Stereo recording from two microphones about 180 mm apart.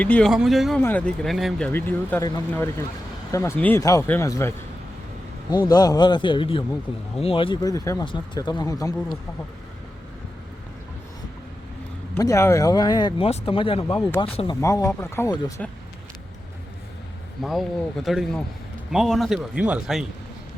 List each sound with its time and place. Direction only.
0.0 s a man's voice: 5° left (ahead or behind)
0.8 s speech: 10° left (ahead or behind)
5.6 s speech: 20° left (ahead or behind)
12.2 s speech: 15° left (ahead or behind)
13.8 s speech: 20° left (ahead or behind)
17.4 s a man's voice: centre (ahead or behind)